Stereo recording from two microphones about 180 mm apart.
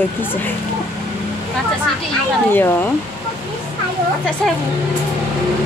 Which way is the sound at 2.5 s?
10° left (ahead or behind).